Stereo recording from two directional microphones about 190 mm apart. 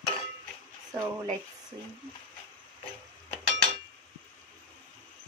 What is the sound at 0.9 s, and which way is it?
Speech, 25° right (ahead or behind).